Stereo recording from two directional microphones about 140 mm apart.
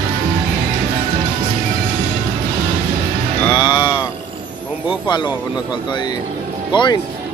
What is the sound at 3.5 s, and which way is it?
Music, 35° left (ahead or behind).